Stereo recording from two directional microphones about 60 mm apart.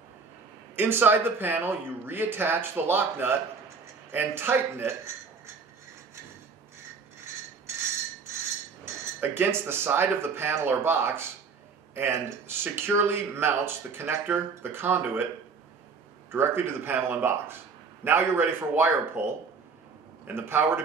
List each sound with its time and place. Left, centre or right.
0.7 s speech: right
9.2 s speech: right
16.3 s speech: right
20.3 s speech: right